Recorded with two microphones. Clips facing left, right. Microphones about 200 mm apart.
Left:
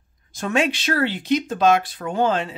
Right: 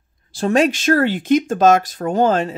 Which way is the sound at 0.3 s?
35° right (ahead or behind).